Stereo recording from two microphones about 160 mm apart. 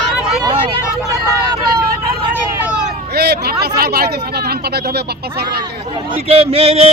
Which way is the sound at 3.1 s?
85° right.